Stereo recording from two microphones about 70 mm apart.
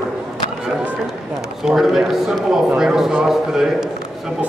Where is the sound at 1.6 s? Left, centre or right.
Centre.